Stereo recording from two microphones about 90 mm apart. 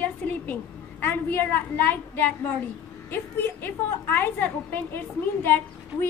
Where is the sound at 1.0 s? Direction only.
25° left (ahead or behind).